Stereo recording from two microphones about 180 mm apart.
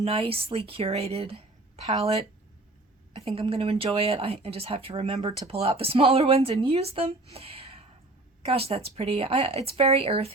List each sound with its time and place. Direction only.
0.0 s a woman's voice: 30° right (ahead or behind)